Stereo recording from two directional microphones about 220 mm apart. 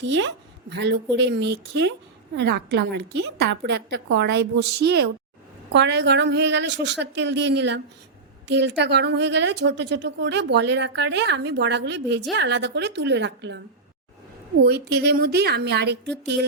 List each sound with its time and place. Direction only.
0.0 s a woman's voice: 55° right (ahead or behind)
14.6 s a woman's voice: 50° right (ahead or behind)